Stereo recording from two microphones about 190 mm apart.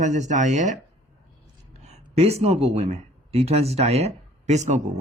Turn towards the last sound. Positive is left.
turn(degrees=-35)  # may be behind; listen again after turning